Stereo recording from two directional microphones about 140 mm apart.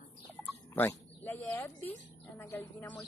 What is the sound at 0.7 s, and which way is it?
Speech, 15° left (ahead or behind).